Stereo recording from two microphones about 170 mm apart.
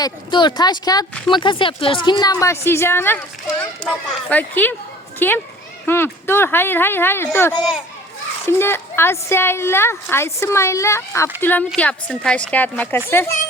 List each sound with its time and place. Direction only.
0.0 s a woman's voice: 25° left (ahead or behind)